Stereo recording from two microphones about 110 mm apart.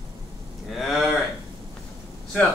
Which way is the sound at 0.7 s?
Centre (ahead or behind).